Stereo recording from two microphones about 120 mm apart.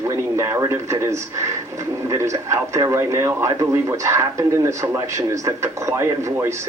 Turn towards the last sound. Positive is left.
turn(degrees=-25)  # may be behind; listen again after turning